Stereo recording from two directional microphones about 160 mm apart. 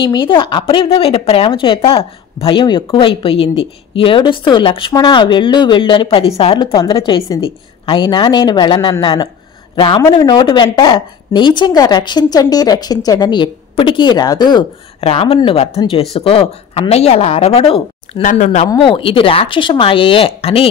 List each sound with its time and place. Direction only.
0.0 s a woman's voice: 30° left (ahead or behind)
15.0 s speech: 35° left (ahead or behind)
18.2 s speech: 55° left (ahead or behind)
18.7 s speech: 30° left (ahead or behind)